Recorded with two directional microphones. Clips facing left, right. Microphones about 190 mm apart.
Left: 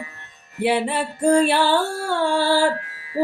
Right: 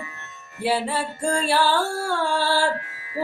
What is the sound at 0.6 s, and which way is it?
Music, 20° left (ahead or behind).